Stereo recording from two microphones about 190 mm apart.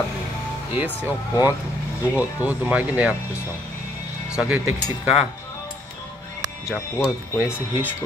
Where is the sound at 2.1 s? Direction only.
5° right (ahead or behind).